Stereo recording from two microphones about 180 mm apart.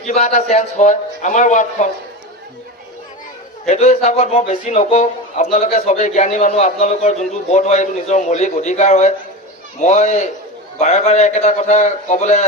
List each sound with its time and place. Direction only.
0.1 s a man's voice: 40° left (ahead or behind)
3.7 s a man's voice: 40° left (ahead or behind)